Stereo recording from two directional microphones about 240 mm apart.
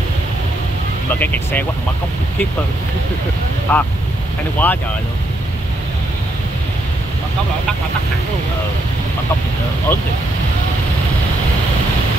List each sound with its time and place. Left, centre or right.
1.2 s speech: centre
3.7 s speech: centre
9.9 s speech: centre